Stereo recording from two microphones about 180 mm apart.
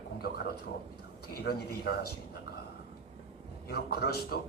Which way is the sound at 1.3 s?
60° left (ahead or behind).